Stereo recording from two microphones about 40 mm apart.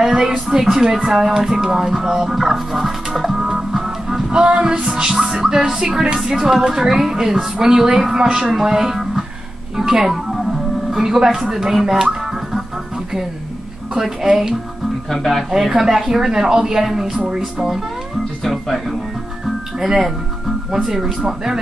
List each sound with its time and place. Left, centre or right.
0.0 s a sound: centre
0.5 s music: centre
4.3 s music: right
5.0 s music: centre
11.5 s speech: centre
13.9 s music: centre
15.0 s speech: centre
15.5 s music: centre
18.4 s speech: centre
19.8 s music: centre